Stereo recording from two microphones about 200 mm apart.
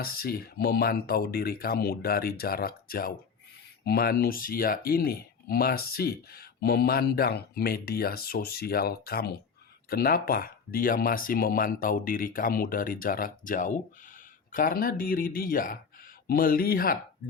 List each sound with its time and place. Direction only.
0.0 s speech: 50° left (ahead or behind)